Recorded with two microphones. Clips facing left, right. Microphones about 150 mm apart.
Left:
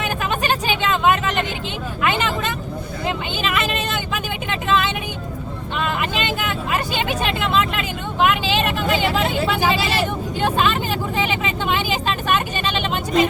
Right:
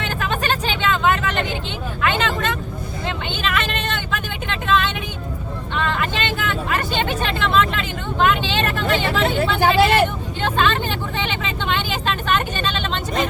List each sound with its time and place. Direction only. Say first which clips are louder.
0.0 s vehicle: left 1 dB; 10° left (ahead or behind)
9.6 s vehicle: right 5 dB; 55° right (ahead or behind)
10.4 s vehicle: even; 10° left (ahead or behind)